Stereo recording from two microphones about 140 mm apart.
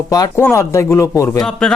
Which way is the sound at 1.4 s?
5° left (ahead or behind).